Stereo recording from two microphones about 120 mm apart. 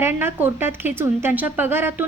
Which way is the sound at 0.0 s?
15° right (ahead or behind).